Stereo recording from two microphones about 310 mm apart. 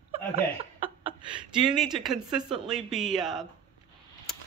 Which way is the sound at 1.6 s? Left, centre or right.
Centre.